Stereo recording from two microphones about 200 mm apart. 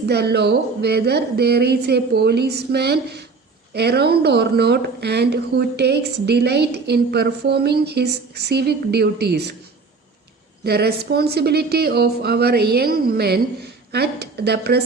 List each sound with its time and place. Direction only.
0.0 s a woman's voice: 55° right (ahead or behind)
10.6 s speech: 55° right (ahead or behind)